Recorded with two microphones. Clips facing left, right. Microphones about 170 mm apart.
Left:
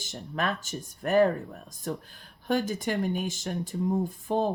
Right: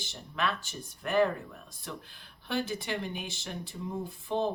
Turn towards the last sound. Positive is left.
turn(degrees=45)  # may be behind; listen again after turning